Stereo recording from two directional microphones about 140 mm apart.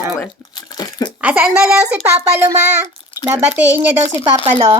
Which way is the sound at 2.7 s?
15° right (ahead or behind).